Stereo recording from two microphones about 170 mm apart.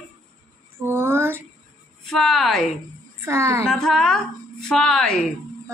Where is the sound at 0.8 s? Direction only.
15° right (ahead or behind).